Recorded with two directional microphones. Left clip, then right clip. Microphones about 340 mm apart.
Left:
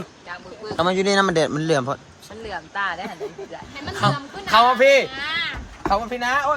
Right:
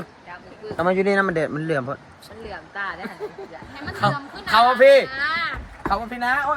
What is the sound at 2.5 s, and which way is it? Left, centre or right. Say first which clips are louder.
Speech: left 4 dB; left.